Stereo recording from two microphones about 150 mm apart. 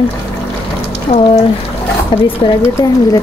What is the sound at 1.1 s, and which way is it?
Speech, 45° left (ahead or behind).